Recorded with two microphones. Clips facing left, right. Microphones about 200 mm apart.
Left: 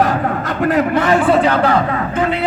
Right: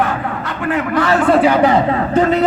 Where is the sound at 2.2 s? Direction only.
40° right (ahead or behind).